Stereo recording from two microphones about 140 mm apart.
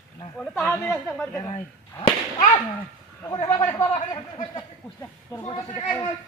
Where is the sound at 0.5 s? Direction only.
20° left (ahead or behind).